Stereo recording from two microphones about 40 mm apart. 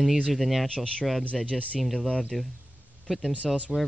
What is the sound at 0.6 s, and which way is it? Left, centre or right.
Speech, left.